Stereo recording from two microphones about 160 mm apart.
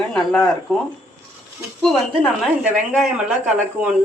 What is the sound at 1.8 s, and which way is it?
Speech, 5° left (ahead or behind).